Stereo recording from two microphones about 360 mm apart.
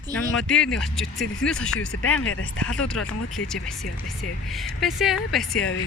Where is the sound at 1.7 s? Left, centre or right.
Left.